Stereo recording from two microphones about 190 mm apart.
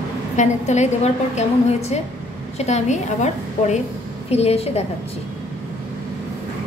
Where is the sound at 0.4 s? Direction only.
35° left (ahead or behind).